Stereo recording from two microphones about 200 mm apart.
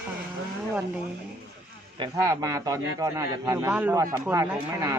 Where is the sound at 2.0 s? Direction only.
20° right (ahead or behind).